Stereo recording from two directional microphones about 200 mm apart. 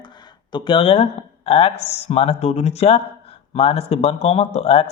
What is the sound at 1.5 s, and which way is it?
Speech, 30° left (ahead or behind).